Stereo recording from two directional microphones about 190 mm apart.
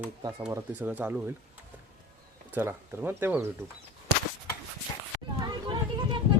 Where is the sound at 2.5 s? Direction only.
10° right (ahead or behind).